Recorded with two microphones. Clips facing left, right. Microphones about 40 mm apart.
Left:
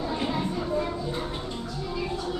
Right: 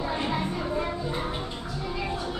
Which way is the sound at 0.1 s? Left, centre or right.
Centre.